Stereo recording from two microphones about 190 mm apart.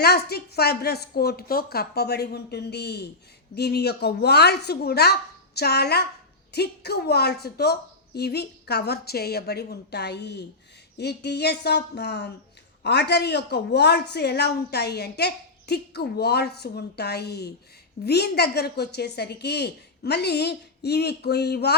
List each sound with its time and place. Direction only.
0.0 s a woman's voice: 55° left (ahead or behind)